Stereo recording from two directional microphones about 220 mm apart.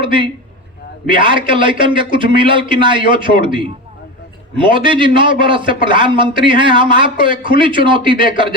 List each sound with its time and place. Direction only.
0.0 s a man's voice: 20° right (ahead or behind)